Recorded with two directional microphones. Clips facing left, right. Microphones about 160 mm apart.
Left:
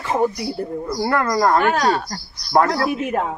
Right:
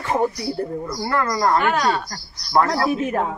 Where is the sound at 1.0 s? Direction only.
50° left (ahead or behind).